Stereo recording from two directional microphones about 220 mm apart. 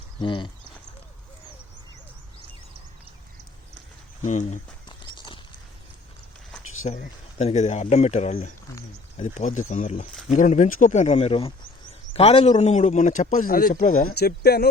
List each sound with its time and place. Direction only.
0.2 s speech: 20° left (ahead or behind)
4.2 s a man's voice: 35° left (ahead or behind)
4.9 s horse: 20° left (ahead or behind)
6.8 s a man's voice: 30° left (ahead or behind)